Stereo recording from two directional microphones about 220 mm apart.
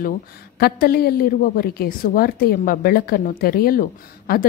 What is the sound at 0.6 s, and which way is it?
A woman's voice, 45° left (ahead or behind).